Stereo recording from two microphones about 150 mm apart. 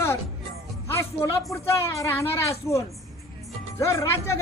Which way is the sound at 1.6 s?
15° left (ahead or behind).